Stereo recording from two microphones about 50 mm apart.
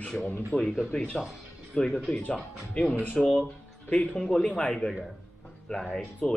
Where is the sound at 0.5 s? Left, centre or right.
Left.